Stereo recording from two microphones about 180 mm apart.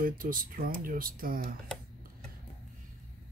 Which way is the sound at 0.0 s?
50° right (ahead or behind).